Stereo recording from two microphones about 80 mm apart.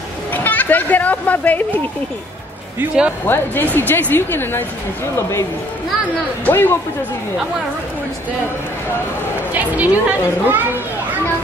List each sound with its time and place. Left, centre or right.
0.3 s a sound: left
3.3 s speech: left
6.4 s speech: left
9.5 s a child's voice: centre